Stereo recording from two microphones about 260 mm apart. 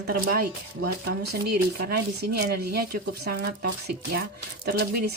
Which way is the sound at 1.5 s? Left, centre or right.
Right.